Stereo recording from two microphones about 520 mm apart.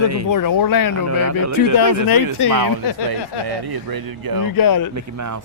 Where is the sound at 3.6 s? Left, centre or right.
Right.